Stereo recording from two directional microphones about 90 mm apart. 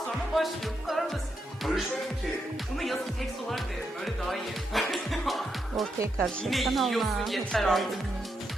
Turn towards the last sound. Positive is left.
turn(degrees=5)  # may be behind; listen again after turning